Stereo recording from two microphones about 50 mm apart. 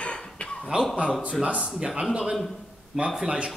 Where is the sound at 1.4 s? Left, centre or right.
Centre.